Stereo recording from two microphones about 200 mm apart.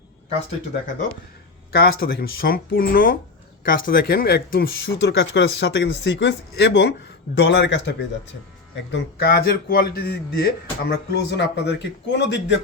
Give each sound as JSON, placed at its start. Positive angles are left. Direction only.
{"t": 1.7, "sound": "speech", "side_deg": 50}
{"t": 4.9, "sound": "speech", "side_deg": 65}
{"t": 8.9, "sound": "speech", "side_deg": 50}